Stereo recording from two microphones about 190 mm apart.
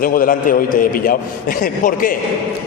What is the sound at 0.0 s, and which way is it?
A man's voice, 50° left (ahead or behind).